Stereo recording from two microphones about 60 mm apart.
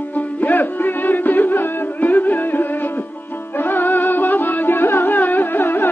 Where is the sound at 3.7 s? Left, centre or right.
Left.